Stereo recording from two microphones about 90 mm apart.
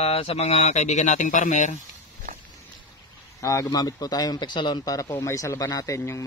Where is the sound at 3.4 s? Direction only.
40° left (ahead or behind).